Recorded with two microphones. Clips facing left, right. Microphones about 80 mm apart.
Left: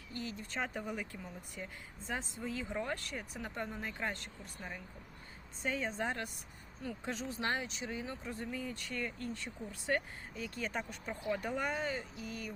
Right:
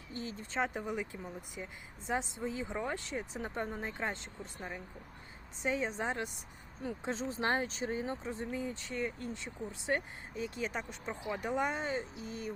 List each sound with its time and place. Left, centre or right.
0.1 s speech: right